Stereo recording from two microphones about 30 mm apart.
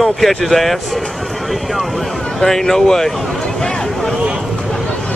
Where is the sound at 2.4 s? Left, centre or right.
Centre.